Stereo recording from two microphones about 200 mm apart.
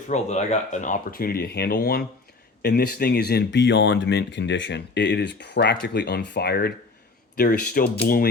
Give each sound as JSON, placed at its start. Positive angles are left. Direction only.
{"t": 0.1, "sound": "speech", "side_deg": 35}